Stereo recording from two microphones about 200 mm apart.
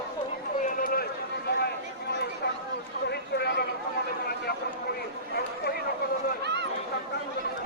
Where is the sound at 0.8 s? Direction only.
45° left (ahead or behind).